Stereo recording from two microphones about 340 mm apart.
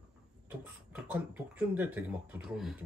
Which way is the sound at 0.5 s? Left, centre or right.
Centre.